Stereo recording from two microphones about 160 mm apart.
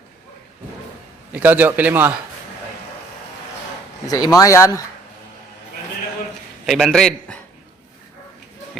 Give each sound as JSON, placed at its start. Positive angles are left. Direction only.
{"t": 1.3, "sound": "a man's voice", "side_deg": -10}
{"t": 4.1, "sound": "speech", "side_deg": 20}
{"t": 6.7, "sound": "a man's voice", "side_deg": 0}